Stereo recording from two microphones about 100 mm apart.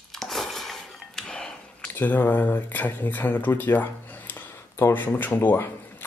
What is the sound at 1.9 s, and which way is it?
Speech, 20° left (ahead or behind).